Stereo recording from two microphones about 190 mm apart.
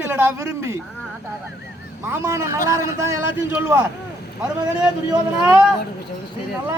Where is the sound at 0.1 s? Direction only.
15° right (ahead or behind).